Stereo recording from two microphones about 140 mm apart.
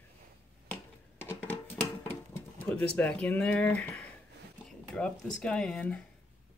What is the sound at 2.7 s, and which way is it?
Speech, 10° left (ahead or behind).